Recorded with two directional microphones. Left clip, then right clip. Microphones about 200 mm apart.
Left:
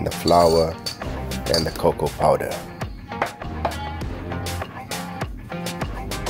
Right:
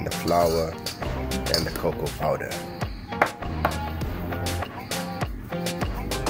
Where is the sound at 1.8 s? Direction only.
25° left (ahead or behind).